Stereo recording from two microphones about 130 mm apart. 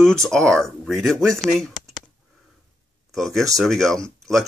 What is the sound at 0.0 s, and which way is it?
Speech, 5° left (ahead or behind).